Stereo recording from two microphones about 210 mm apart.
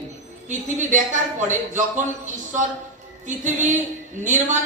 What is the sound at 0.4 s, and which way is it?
Speech, 35° right (ahead or behind).